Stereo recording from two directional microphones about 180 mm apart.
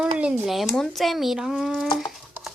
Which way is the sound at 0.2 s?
5° right (ahead or behind).